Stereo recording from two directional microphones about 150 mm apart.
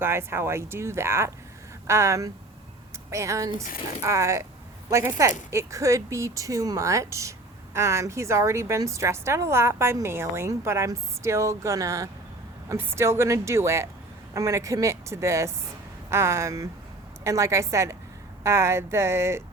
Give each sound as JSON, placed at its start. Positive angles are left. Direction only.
{"t": 0.0, "sound": "speech", "side_deg": -15}